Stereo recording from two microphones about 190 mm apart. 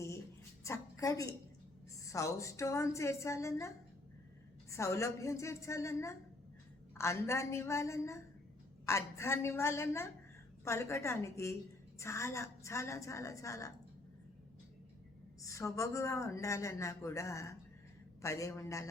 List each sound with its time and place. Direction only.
0.6 s a woman's voice: 15° left (ahead or behind)
4.7 s a man's voice: 15° left (ahead or behind)
15.4 s a man's voice: 15° left (ahead or behind)